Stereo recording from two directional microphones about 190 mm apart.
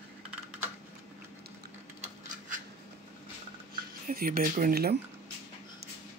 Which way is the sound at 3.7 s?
50° right (ahead or behind).